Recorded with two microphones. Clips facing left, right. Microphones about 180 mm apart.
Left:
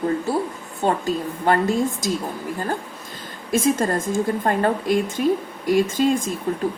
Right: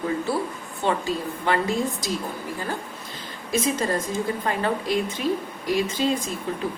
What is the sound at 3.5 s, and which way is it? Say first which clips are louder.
A woman's voice: left 4 dB; 50° left (ahead or behind).